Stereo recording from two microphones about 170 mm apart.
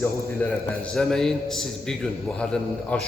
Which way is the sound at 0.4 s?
10° left (ahead or behind).